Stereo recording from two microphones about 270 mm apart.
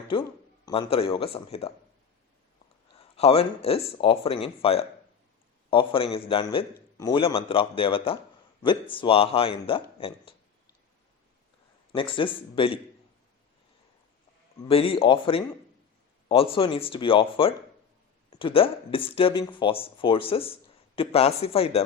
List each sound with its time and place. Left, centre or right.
0.1 s speech: centre
3.2 s speech: left
11.9 s speech: centre
14.7 s speech: left